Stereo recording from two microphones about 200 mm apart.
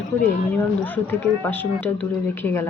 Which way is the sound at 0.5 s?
10° left (ahead or behind).